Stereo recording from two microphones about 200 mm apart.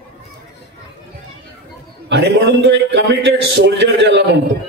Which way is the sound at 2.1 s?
60° right (ahead or behind).